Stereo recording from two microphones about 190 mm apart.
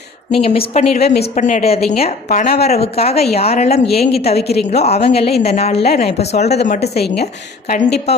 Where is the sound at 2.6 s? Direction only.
35° left (ahead or behind).